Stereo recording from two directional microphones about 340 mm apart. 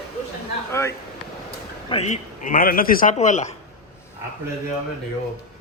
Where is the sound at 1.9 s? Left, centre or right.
Centre.